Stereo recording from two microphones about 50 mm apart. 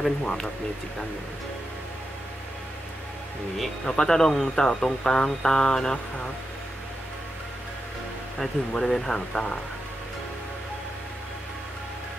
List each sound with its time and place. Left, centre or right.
0.2 s speech: centre
3.5 s speech: centre
8.4 s speech: centre